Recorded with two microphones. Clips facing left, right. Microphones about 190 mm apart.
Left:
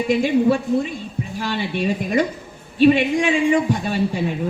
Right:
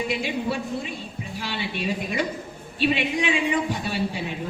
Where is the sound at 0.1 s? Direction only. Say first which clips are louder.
Left 10 dB; 45° left (ahead or behind).